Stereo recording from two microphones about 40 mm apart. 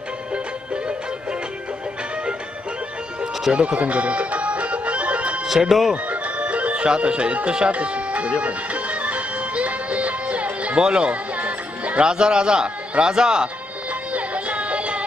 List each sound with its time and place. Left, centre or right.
3.5 s music: right
5.5 s speech: centre
6.0 s music: right
10.8 s a man's voice: right
11.3 s music: right
12.0 s a man's voice: right
14.1 s music: right